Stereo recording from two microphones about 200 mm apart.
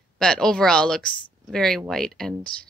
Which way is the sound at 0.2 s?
5° left (ahead or behind).